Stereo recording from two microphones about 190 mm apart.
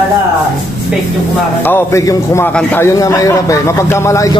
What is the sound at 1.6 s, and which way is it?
A man's voice, 10° left (ahead or behind).